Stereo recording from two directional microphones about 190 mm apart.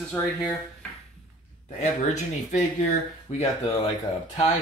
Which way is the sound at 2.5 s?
40° left (ahead or behind).